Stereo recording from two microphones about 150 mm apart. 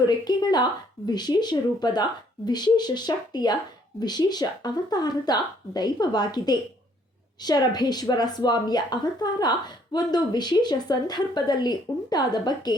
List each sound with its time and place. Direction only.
0.0 s a woman's voice: 25° left (ahead or behind)